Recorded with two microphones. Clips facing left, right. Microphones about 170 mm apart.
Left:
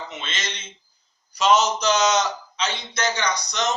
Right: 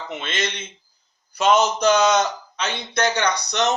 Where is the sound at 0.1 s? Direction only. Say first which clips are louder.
Right 6 dB; 55° right (ahead or behind).